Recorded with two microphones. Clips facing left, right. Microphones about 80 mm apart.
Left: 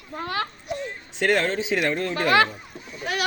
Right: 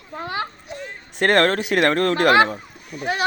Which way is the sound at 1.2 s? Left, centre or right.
Right.